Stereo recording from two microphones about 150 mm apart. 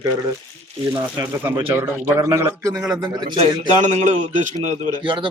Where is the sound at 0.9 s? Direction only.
15° right (ahead or behind); by 3.3 s 30° right (ahead or behind).